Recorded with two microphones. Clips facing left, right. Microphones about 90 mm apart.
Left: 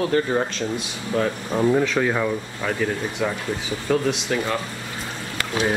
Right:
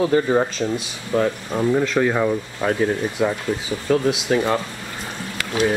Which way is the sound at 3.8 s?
5° right (ahead or behind).